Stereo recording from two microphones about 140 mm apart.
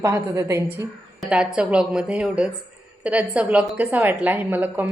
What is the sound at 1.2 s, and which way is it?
A woman's voice, 5° right (ahead or behind).